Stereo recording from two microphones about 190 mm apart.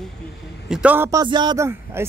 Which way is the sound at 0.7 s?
10° right (ahead or behind).